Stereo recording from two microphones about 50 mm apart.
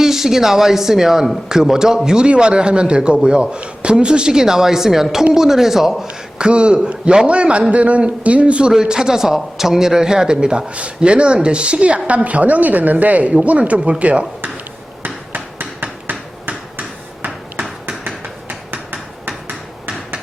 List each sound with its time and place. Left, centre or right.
0.0 s a woman's voice: centre
6.1 s a man's voice: right
15.0 s hammer: right
17.2 s a sound: right